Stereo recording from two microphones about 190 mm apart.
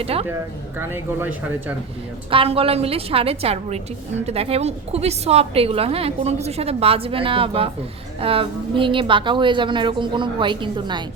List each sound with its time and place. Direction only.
0.0 s a woman's voice: 30° right (ahead or behind)
0.8 s speech: 10° right (ahead or behind)
2.3 s a woman's voice: 30° right (ahead or behind)